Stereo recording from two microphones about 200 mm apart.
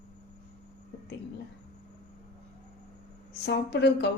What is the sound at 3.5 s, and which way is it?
Speech, 55° left (ahead or behind).